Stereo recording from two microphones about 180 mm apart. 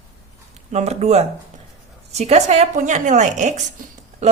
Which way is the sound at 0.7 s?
40° right (ahead or behind).